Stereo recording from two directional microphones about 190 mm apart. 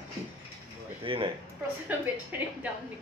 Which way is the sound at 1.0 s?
30° right (ahead or behind).